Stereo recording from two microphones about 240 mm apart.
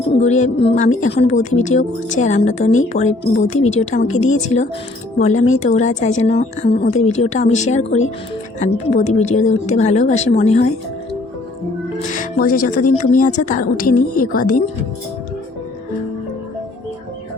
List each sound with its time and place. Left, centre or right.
0.2 s speech: left
12.0 s speech: left